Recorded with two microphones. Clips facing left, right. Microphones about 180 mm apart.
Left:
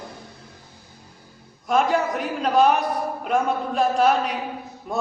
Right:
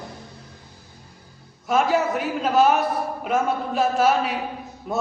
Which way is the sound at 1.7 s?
5° right (ahead or behind).